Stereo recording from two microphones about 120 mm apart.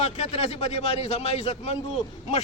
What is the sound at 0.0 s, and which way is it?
A man's voice, 55° left (ahead or behind).